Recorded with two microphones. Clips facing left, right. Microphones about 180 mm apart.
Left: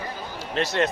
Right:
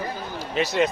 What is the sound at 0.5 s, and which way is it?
Speech, centre (ahead or behind).